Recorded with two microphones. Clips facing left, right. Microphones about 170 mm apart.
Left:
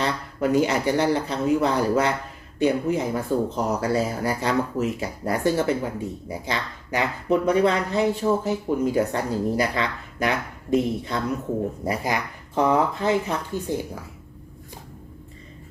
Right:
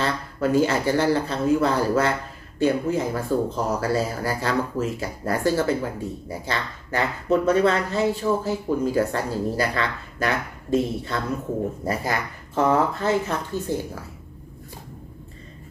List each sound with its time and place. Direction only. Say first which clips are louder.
0.0 s speech: even; 20° left (ahead or behind)